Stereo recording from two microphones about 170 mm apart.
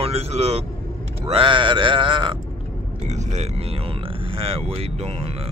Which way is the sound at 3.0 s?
40° right (ahead or behind).